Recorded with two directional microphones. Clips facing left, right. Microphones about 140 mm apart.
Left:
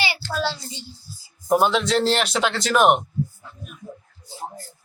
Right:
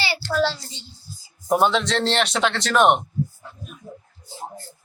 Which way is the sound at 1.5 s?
Centre (ahead or behind).